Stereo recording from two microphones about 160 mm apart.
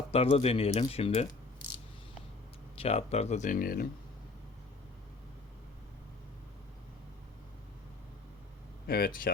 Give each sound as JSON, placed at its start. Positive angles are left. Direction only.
{"t": 0.1, "sound": "speech", "side_deg": 40}
{"t": 2.7, "sound": "speech", "side_deg": 40}
{"t": 8.9, "sound": "speech", "side_deg": 70}